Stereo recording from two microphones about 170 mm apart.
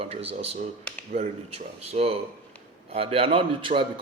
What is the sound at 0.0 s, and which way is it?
A man's voice, 35° right (ahead or behind).